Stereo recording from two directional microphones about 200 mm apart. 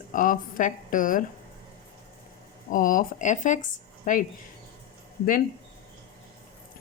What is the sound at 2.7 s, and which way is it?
Speech, 45° left (ahead or behind).